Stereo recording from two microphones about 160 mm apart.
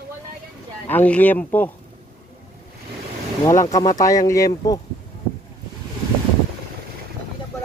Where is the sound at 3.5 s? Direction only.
20° left (ahead or behind).